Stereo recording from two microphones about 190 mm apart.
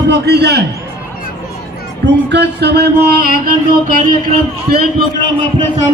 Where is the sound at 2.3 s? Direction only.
60° right (ahead or behind).